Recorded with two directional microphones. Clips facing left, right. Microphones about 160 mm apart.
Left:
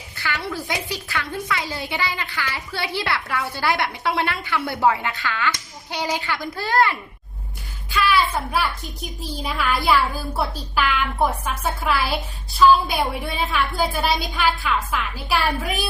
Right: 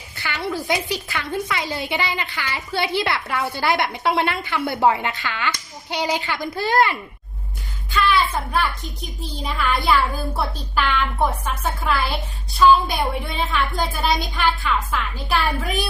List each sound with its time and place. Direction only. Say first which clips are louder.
0.2 s a woman's voice: right 2 dB; 20° right (ahead or behind)
7.9 s a woman's voice: even; 5° left (ahead or behind)
11.4 s a woman's voice: even; 5° left (ahead or behind)